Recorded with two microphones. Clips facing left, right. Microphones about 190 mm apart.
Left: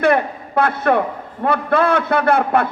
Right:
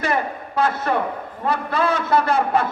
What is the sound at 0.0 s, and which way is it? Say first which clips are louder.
A man's voice: left 7 dB; 60° left (ahead or behind).